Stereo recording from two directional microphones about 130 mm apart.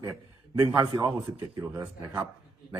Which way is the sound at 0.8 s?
35° right (ahead or behind).